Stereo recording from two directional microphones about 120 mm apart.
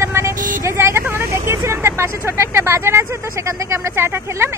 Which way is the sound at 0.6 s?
20° right (ahead or behind).